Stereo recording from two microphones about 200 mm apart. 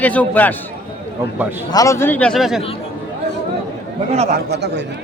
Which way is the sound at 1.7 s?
15° left (ahead or behind).